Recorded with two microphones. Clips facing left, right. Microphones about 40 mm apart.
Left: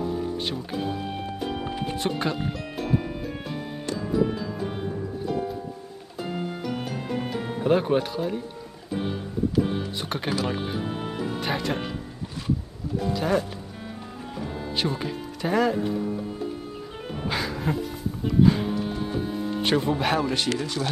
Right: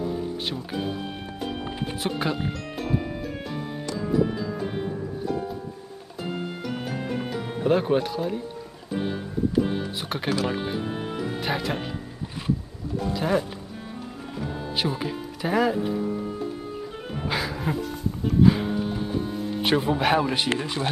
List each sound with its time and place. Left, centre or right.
0.5 s speech: centre
1.6 s music: centre
7.6 s speech: centre
9.5 s music: centre
11.3 s speech: centre
13.1 s speech: centre
14.8 s speech: centre
17.3 s music: centre
20.4 s speech: right